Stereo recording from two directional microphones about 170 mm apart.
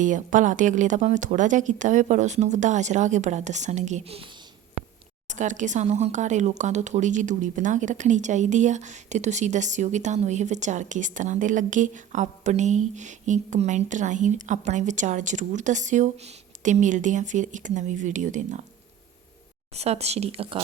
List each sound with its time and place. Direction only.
0.0 s speech: 50° right (ahead or behind)
5.3 s speech: 45° right (ahead or behind)
19.7 s speech: 40° right (ahead or behind)